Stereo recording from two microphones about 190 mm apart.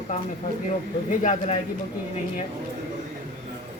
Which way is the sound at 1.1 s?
40° left (ahead or behind).